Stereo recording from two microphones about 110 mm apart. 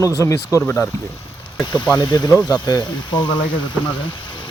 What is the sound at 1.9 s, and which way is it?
Speech, 40° left (ahead or behind).